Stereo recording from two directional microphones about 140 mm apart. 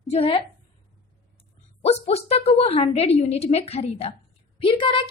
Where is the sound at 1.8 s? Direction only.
50° left (ahead or behind).